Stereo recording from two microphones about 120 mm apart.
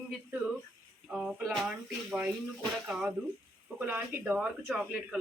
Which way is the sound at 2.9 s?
5° right (ahead or behind).